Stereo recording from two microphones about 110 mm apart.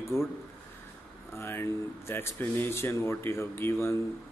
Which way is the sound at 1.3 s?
20° left (ahead or behind).